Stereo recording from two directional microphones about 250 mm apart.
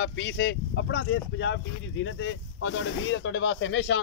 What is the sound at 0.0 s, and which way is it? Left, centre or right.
Speech, left.